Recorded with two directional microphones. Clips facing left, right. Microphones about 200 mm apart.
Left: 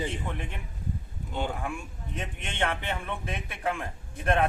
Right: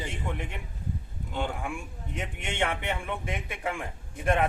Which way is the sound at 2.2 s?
10° right (ahead or behind).